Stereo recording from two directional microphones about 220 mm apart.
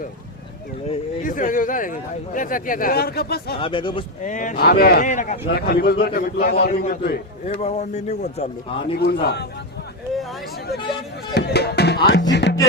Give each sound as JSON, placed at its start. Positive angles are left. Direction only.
{"t": 0.9, "sound": "speech", "side_deg": 35}
{"t": 3.6, "sound": "speech", "side_deg": 20}
{"t": 4.2, "sound": "speech", "side_deg": 35}
{"t": 5.5, "sound": "a man's voice", "side_deg": 45}
{"t": 7.6, "sound": "speech", "side_deg": 30}
{"t": 9.0, "sound": "a man's voice", "side_deg": 45}
{"t": 11.3, "sound": "speech", "side_deg": 45}
{"t": 12.0, "sound": "music", "side_deg": 50}